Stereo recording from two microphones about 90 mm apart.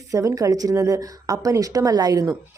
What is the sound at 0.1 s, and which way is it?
Speech, 35° right (ahead or behind).